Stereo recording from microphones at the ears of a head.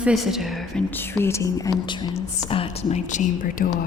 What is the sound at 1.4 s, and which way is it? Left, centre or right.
Speech, left.